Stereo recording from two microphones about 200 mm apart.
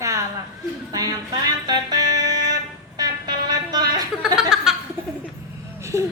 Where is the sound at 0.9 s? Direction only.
20° right (ahead or behind).